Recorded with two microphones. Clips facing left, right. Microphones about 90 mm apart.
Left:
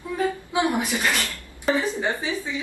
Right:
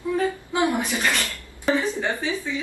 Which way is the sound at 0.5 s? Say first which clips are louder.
Even; 10° left (ahead or behind).